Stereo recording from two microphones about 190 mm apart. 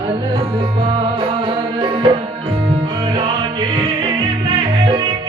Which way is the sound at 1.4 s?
25° right (ahead or behind).